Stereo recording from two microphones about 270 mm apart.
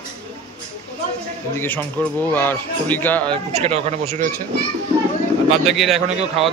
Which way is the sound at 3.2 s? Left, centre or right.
Right.